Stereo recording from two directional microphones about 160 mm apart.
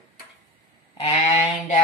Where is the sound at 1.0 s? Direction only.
45° left (ahead or behind).